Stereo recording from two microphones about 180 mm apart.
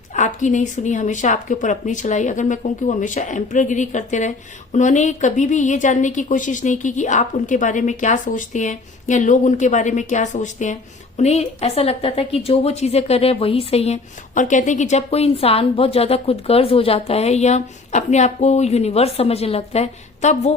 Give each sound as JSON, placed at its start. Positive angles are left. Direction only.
{"t": 0.1, "sound": "a woman's voice", "side_deg": 40}